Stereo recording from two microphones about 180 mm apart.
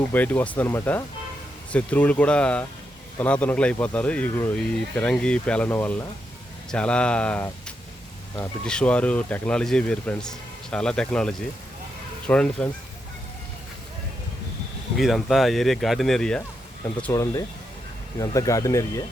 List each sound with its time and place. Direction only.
0.1 s speech: 10° left (ahead or behind)
8.6 s speech: 5° left (ahead or behind)
14.9 s speech: centre (ahead or behind)
16.8 s speech: 15° left (ahead or behind)